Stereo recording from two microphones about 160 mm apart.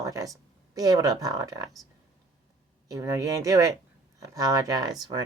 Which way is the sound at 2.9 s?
20° right (ahead or behind).